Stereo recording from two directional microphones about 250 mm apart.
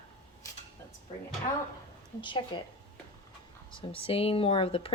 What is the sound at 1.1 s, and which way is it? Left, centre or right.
Speech, left.